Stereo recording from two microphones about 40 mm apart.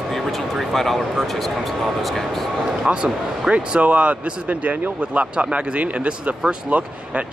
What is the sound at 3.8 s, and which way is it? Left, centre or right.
Speech, right.